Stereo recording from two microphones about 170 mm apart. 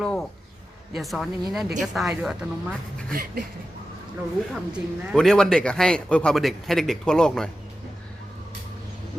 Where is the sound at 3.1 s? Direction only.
55° right (ahead or behind).